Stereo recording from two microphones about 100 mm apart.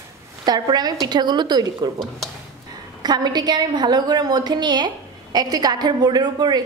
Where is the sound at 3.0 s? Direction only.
45° right (ahead or behind).